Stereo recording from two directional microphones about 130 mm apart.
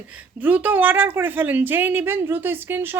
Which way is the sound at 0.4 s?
10° right (ahead or behind).